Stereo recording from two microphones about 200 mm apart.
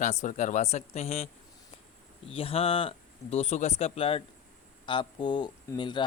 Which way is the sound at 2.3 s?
30° left (ahead or behind).